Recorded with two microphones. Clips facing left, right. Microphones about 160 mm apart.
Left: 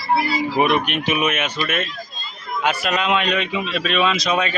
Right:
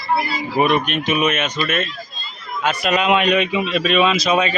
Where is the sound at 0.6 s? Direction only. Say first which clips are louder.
Right 3 dB; 10° left (ahead or behind).